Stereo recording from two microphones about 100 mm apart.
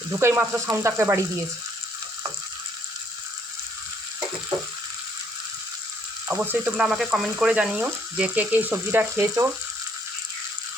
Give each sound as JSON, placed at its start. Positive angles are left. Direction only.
{"t": 0.2, "sound": "speech", "side_deg": -25}
{"t": 6.3, "sound": "speech", "side_deg": -20}